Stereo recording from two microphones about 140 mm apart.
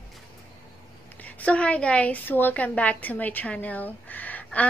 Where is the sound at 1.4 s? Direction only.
10° left (ahead or behind).